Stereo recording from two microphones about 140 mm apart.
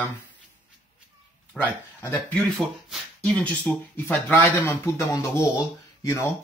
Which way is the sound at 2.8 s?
Centre (ahead or behind).